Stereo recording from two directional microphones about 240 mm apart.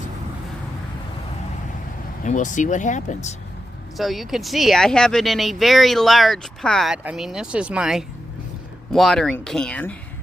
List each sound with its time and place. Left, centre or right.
2.2 s speech: left
3.9 s speech: centre